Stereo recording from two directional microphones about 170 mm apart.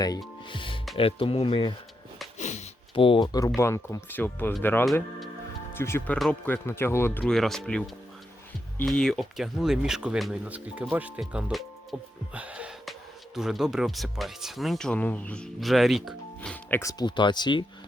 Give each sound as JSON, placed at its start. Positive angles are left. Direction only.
{"t": 0.4, "sound": "music", "side_deg": 30}
{"t": 0.9, "sound": "speech", "side_deg": 35}
{"t": 2.4, "sound": "a sound", "side_deg": 45}
{"t": 2.9, "sound": "speech", "side_deg": 30}
{"t": 17.0, "sound": "speech", "side_deg": 25}